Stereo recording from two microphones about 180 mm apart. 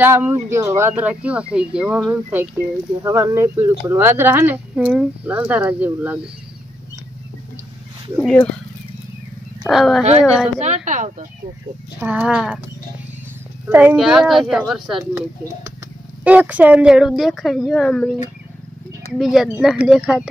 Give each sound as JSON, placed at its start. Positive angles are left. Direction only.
{"t": 0.0, "sound": "speech", "side_deg": -10}
{"t": 9.7, "sound": "speech", "side_deg": 0}
{"t": 10.6, "sound": "a woman's voice", "side_deg": -40}
{"t": 12.0, "sound": "speech", "side_deg": -10}
{"t": 13.7, "sound": "speech", "side_deg": -10}
{"t": 16.3, "sound": "speech", "side_deg": -10}
{"t": 19.1, "sound": "speech", "side_deg": 0}